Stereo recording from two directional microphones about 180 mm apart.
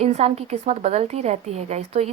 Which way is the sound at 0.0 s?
35° right (ahead or behind).